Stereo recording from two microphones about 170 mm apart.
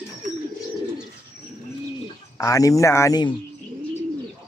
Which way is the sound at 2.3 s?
20° left (ahead or behind).